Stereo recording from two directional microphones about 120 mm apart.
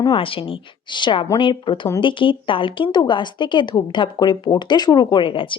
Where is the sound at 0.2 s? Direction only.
50° left (ahead or behind).